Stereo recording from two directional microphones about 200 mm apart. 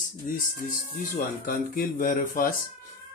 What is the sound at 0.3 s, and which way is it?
A man's voice, 45° left (ahead or behind).